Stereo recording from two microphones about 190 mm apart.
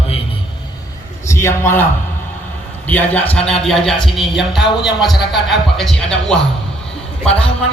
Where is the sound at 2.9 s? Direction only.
10° left (ahead or behind).